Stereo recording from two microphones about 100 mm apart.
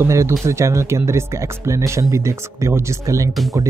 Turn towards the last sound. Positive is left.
turn(degrees=-30)  # may be behind; listen again after turning